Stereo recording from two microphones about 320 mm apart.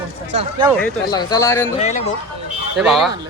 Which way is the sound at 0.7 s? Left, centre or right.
Centre.